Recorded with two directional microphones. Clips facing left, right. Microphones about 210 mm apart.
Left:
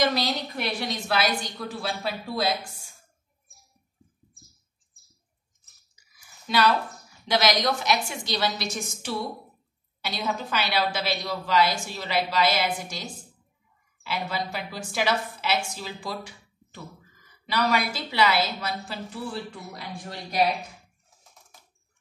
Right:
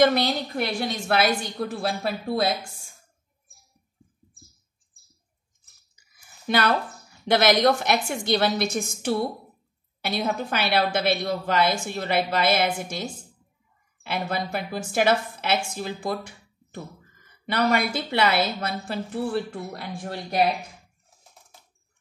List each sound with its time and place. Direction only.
0.0 s a woman's voice: 55° right (ahead or behind)
6.1 s a sound: 55° right (ahead or behind)
7.2 s a woman's voice: 55° right (ahead or behind)